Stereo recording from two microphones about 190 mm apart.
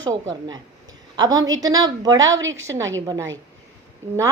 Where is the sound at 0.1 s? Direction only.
20° right (ahead or behind).